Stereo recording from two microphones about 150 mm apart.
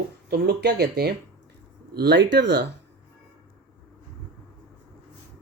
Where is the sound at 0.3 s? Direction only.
90° right.